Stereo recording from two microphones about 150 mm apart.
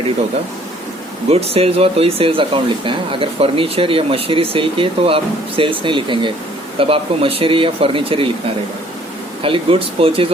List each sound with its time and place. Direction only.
1.3 s speech: 40° right (ahead or behind)
9.4 s speech: 35° right (ahead or behind)